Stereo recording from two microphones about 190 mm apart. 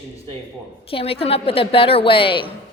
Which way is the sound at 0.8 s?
30° left (ahead or behind).